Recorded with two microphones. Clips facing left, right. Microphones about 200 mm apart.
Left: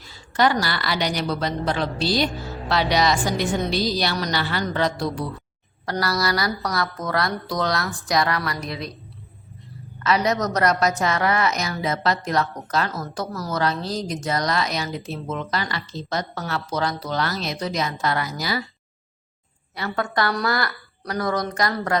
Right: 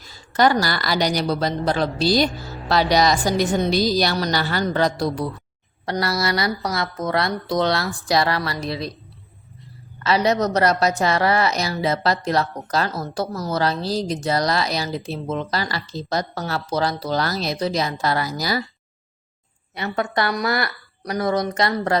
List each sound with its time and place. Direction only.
0.1 s a woman's voice: 40° right (ahead or behind)
5.8 s a woman's voice: 25° right (ahead or behind)
10.0 s a woman's voice: 30° right (ahead or behind)
13.0 s a woman's voice: 20° right (ahead or behind); by 18.6 s 40° right (ahead or behind)
19.7 s a woman's voice: 20° right (ahead or behind)